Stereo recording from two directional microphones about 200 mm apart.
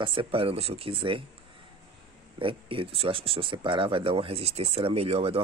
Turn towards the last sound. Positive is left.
turn(degrees=-30)  # may be behind; listen again after turning